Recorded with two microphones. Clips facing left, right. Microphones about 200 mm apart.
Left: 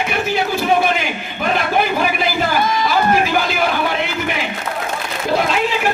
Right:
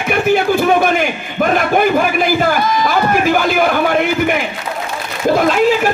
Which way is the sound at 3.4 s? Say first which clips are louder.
Right 5 dB; 50° right (ahead or behind).